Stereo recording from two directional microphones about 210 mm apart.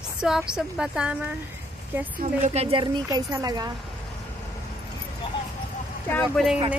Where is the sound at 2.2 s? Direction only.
40° right (ahead or behind).